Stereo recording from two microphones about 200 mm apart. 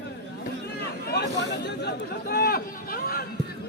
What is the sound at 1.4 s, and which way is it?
Speech, 55° left (ahead or behind).